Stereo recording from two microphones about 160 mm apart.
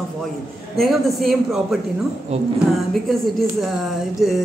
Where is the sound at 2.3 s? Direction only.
40° right (ahead or behind).